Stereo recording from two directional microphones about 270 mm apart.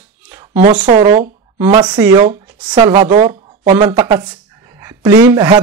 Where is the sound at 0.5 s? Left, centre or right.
Right.